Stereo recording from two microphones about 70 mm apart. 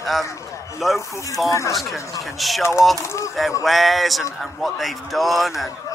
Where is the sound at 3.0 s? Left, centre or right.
Left.